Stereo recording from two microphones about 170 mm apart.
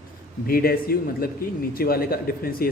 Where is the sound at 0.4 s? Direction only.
60° left (ahead or behind).